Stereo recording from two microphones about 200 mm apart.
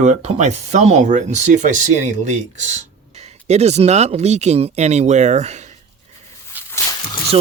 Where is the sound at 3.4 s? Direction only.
35° right (ahead or behind).